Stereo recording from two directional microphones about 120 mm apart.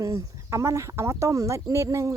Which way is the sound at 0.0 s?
25° right (ahead or behind).